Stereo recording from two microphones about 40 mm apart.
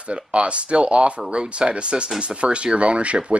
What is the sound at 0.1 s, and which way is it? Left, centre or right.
Speech, right.